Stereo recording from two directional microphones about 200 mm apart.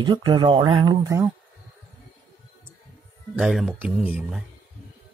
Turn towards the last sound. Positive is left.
turn(degrees=-5)  # may be behind; listen again after turning